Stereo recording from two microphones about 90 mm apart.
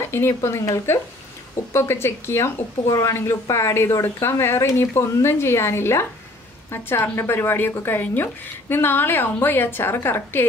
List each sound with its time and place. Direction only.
0.1 s speech: 25° left (ahead or behind)